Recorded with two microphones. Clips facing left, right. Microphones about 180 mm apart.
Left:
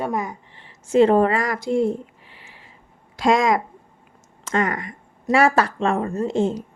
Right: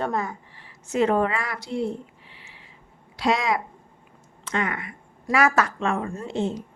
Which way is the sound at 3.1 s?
45° left (ahead or behind).